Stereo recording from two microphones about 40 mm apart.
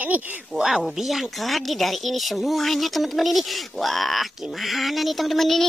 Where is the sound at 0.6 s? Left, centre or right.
Centre.